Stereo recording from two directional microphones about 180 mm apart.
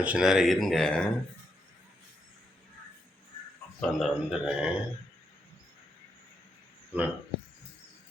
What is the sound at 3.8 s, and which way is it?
Speech, centre (ahead or behind).